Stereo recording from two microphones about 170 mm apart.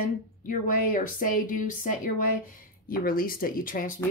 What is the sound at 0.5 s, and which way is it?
A woman's voice, 55° left (ahead or behind).